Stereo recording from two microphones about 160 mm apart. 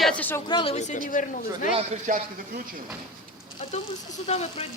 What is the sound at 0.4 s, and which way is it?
Speech, 30° left (ahead or behind).